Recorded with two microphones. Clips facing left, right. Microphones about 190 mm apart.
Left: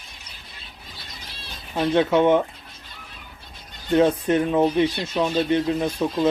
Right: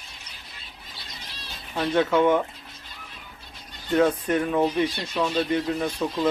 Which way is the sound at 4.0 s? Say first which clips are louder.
Left 3 dB; 25° left (ahead or behind).